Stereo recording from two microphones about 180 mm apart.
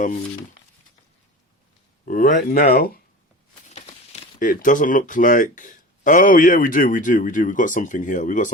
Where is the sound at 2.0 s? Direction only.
50° left (ahead or behind).